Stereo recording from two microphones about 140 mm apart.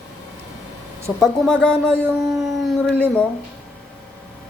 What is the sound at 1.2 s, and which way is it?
Speech, 5° left (ahead or behind).